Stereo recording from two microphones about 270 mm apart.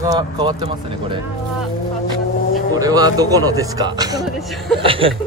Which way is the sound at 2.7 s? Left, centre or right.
Centre.